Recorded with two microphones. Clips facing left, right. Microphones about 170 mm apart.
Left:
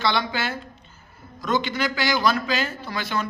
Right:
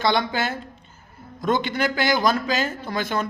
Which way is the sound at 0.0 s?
50° right (ahead or behind).